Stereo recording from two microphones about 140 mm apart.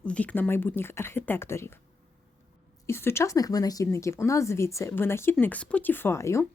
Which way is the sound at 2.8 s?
20° left (ahead or behind).